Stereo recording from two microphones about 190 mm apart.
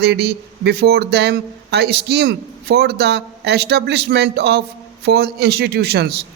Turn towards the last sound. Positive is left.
turn(degrees=-60)  # may be behind; listen again after turning